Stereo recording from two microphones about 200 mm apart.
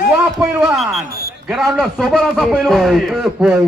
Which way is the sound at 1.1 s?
50° right (ahead or behind).